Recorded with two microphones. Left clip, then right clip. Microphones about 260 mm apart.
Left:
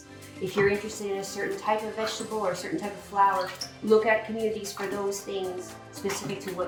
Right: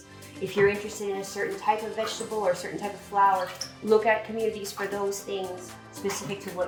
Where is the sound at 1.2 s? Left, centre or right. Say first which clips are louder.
Right 1 dB; centre.